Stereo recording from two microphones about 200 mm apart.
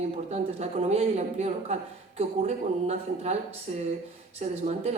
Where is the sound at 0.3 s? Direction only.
30° right (ahead or behind).